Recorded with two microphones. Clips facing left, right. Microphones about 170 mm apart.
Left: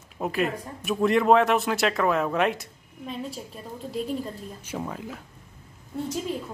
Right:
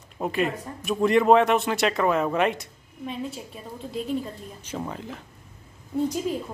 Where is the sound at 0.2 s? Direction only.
Centre (ahead or behind).